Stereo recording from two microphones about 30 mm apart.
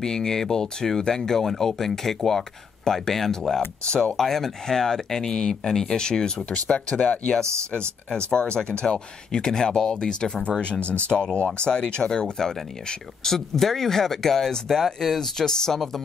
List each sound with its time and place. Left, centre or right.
0.0 s speech: left
6.5 s speech: left
8.1 s speech: left
10.6 s speech: left; by 15.8 s centre